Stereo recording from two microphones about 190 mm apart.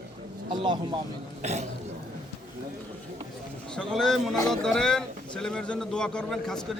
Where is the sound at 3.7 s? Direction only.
Centre (ahead or behind).